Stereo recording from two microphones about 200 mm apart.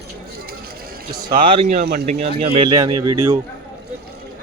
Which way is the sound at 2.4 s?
25° right (ahead or behind).